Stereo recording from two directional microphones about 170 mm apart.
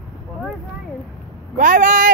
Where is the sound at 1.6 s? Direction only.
50° right (ahead or behind).